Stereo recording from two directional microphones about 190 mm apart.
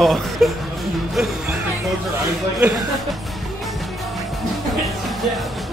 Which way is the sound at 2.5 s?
Centre (ahead or behind).